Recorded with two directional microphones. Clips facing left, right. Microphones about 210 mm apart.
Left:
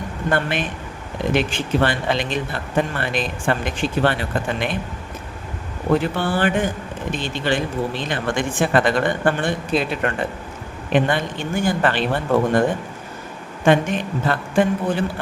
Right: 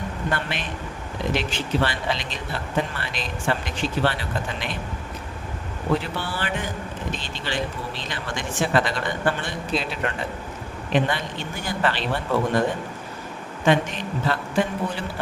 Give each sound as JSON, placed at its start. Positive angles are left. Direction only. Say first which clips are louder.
{"t": 0.3, "sound": "speech", "louder": "left 8 dB", "side_deg": 55}
{"t": 6.0, "sound": "speech", "louder": "left 9 dB", "side_deg": 50}
{"t": 13.7, "sound": "speech", "louder": "left 4 dB", "side_deg": 55}